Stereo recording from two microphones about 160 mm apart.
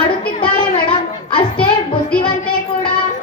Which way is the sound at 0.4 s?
30° left (ahead or behind).